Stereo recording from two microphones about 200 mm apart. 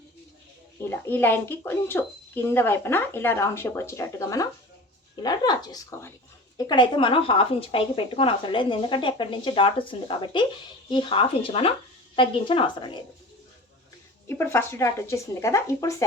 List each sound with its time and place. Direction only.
0.9 s speech: 10° left (ahead or behind)
14.3 s speech: 10° left (ahead or behind)